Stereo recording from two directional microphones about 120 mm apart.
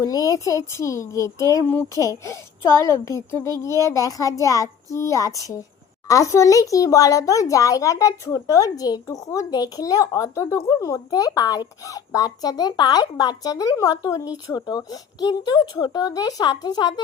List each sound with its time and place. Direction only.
0.0 s a child's voice: 30° left (ahead or behind)